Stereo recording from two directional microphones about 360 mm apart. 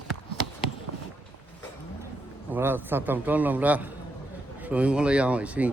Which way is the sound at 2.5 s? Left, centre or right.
Centre.